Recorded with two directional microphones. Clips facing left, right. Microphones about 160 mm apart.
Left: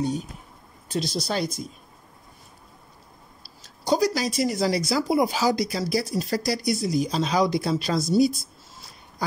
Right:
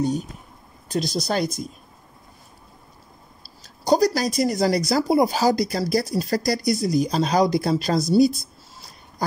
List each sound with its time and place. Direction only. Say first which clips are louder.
0.8 s speech: right 3 dB; 40° right (ahead or behind)
3.6 s speech: right 4 dB; 40° right (ahead or behind)